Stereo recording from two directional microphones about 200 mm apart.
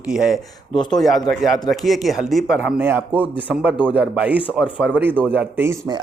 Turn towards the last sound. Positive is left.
turn(degrees=-15)  # may be behind; listen again after turning